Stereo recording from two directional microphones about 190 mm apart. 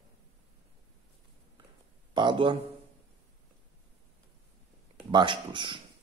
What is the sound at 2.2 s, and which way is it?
Speech, 25° right (ahead or behind).